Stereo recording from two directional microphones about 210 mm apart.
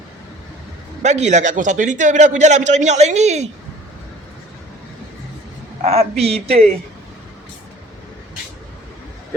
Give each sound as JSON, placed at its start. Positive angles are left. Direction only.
{"t": 1.0, "sound": "a man's voice", "side_deg": -35}
{"t": 5.8, "sound": "speech", "side_deg": -30}